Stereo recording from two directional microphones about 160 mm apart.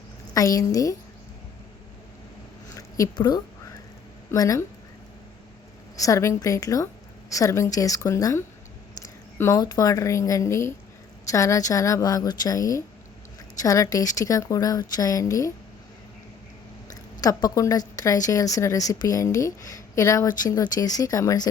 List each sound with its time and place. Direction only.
0.3 s speech: 20° left (ahead or behind)
2.6 s a sound: 20° left (ahead or behind)
4.3 s speech: 20° left (ahead or behind)
6.0 s speech: 20° left (ahead or behind)
16.9 s speech: 25° left (ahead or behind)